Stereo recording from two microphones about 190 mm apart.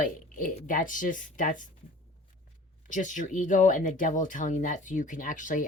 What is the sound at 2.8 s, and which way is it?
Speech, 40° left (ahead or behind).